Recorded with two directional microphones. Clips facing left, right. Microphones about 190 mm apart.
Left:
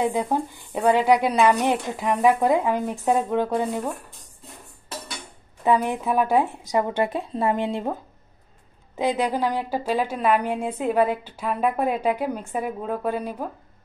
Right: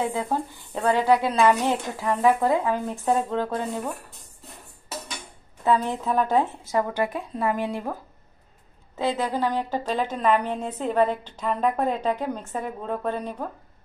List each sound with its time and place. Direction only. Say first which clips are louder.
0.0 s a woman's voice: left 3 dB; 15° left (ahead or behind)
5.6 s a woman's voice: left 2 dB; 15° left (ahead or behind)